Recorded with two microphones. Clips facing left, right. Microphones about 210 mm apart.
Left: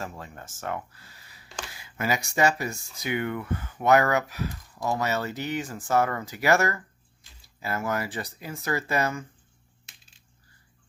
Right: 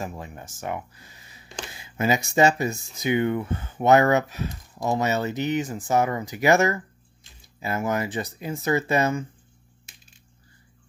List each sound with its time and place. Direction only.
0.0 s speech: 15° right (ahead or behind)